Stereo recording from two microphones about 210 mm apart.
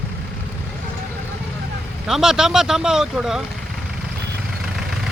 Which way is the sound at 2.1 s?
Centre (ahead or behind).